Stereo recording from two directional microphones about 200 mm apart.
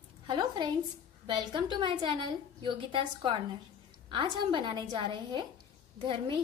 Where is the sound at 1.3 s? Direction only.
25° right (ahead or behind).